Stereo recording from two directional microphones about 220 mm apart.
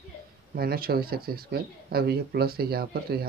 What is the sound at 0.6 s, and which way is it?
Speech, 45° right (ahead or behind).